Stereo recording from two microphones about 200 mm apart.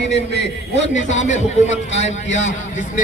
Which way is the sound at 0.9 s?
35° left (ahead or behind).